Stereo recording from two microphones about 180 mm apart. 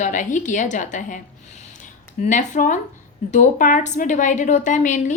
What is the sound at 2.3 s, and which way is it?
A woman's voice, 45° left (ahead or behind).